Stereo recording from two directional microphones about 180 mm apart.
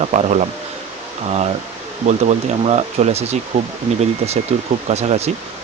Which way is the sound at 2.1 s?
40° right (ahead or behind).